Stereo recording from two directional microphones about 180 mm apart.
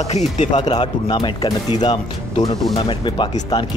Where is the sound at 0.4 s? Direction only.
40° left (ahead or behind).